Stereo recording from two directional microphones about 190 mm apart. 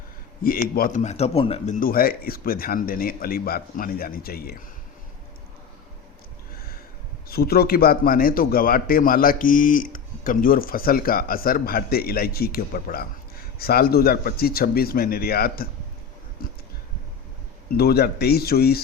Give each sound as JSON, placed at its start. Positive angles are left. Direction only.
{"t": 0.8, "sound": "a man's voice", "side_deg": 45}
{"t": 7.3, "sound": "a man's voice", "side_deg": 55}
{"t": 17.7, "sound": "speech", "side_deg": 55}